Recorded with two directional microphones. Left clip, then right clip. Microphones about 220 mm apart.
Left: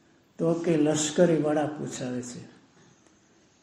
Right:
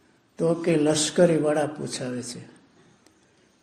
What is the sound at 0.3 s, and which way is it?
A man's voice, 35° right (ahead or behind).